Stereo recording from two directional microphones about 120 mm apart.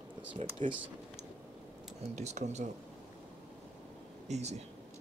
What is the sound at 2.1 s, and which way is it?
Speech, 70° right (ahead or behind).